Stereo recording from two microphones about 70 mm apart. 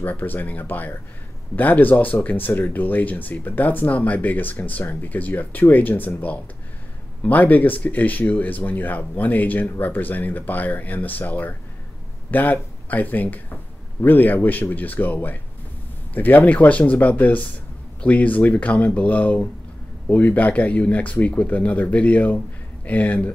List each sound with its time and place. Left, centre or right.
0.0 s speech: left